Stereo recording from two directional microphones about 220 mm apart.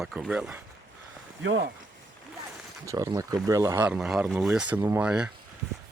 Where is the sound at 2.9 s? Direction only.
15° right (ahead or behind).